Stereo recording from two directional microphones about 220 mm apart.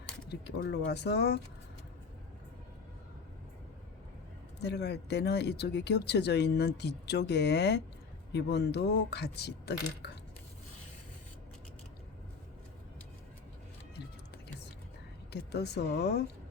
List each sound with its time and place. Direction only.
0.3 s speech: 50° left (ahead or behind)
4.6 s speech: 50° left (ahead or behind)
15.3 s speech: 50° left (ahead or behind)